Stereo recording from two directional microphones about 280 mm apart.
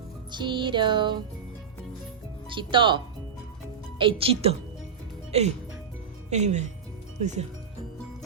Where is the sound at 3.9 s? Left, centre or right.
Centre.